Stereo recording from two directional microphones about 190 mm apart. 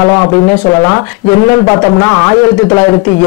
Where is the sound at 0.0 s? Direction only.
20° left (ahead or behind).